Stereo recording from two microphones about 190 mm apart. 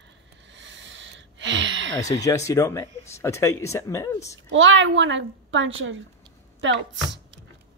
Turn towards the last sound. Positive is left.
turn(degrees=-80)